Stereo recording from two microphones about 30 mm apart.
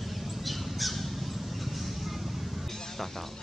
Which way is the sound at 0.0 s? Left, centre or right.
Centre.